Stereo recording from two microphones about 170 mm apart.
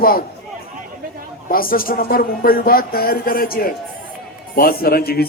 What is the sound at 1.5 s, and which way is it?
Speech, 60° left (ahead or behind).